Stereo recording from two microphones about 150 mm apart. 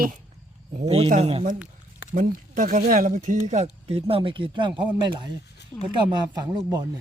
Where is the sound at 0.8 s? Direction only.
40° right (ahead or behind).